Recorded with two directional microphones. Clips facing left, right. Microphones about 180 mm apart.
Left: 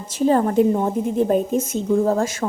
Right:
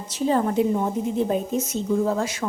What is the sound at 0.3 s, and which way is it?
A woman's voice, 45° left (ahead or behind).